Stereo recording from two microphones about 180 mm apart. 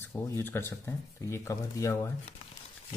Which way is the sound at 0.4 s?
10° left (ahead or behind).